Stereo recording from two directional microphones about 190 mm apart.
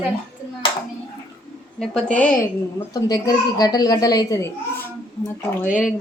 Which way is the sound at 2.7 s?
20° left (ahead or behind).